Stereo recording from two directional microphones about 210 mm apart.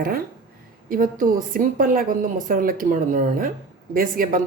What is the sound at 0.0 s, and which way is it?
Speech, 45° right (ahead or behind).